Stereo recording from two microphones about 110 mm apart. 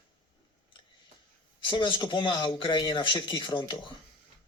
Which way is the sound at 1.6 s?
45° left (ahead or behind).